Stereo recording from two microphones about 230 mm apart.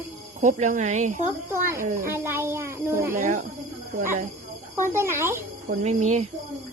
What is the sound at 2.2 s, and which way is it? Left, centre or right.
Speech, centre.